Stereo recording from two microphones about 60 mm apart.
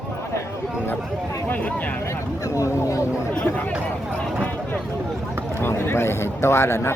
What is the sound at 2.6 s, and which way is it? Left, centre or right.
Speech, left.